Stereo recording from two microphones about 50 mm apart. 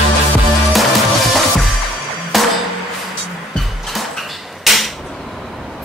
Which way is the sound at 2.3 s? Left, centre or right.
Centre.